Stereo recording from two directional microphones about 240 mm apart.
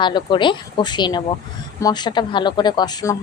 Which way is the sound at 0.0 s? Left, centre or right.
Centre.